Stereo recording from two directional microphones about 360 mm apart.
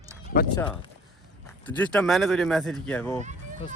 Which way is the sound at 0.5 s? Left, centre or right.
Centre.